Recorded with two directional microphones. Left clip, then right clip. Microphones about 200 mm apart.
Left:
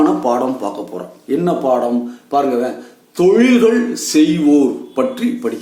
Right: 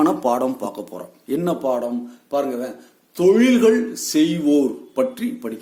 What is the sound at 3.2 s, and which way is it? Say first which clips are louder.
Speech: left 4 dB; 45° right (ahead or behind).